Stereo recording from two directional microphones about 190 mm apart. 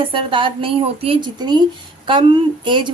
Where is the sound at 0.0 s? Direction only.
25° right (ahead or behind).